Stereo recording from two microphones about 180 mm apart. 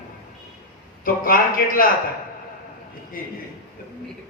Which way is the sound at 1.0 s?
50° left (ahead or behind).